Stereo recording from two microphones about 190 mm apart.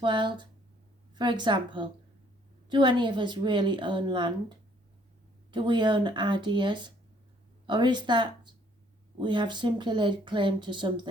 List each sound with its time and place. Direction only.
0.0 s speech: 25° right (ahead or behind)